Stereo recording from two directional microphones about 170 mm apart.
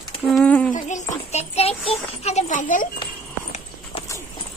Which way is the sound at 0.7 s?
45° left (ahead or behind).